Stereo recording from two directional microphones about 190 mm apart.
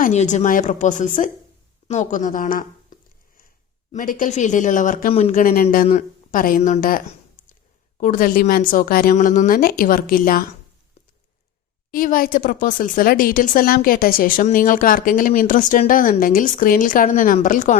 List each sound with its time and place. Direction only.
0.0 s speech: 40° left (ahead or behind)
9.1 s speech: 40° left (ahead or behind)
11.9 s speech: 50° left (ahead or behind)